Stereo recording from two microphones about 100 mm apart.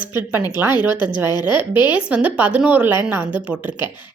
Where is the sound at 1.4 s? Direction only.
15° right (ahead or behind).